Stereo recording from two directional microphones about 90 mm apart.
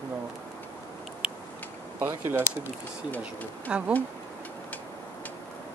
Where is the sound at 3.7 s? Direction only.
15° right (ahead or behind).